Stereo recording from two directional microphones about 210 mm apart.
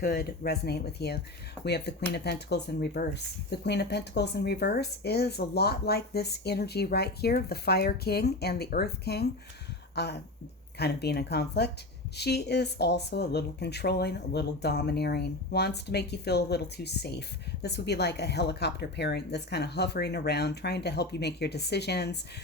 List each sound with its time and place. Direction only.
0.0 s speech: 45° left (ahead or behind)
9.9 s a sound: 50° left (ahead or behind)
10.8 s speech: 50° left (ahead or behind)